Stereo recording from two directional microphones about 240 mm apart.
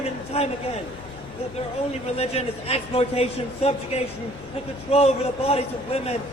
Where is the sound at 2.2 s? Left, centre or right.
Left.